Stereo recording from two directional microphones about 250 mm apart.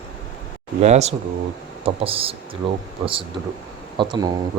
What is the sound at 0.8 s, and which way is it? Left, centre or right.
Speech, right.